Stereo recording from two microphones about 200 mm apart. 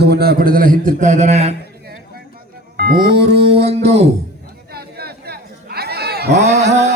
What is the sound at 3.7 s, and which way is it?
Music, 30° right (ahead or behind).